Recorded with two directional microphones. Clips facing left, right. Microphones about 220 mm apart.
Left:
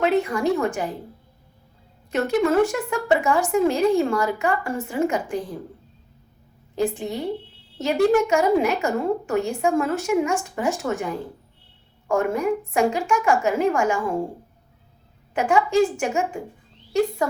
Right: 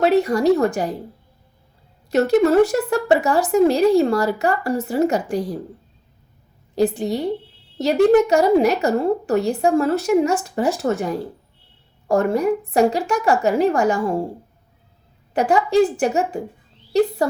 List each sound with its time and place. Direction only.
0.0 s speech: 40° right (ahead or behind)
2.0 s speech: 40° right (ahead or behind)
6.7 s speech: 35° right (ahead or behind)
15.3 s speech: 35° right (ahead or behind)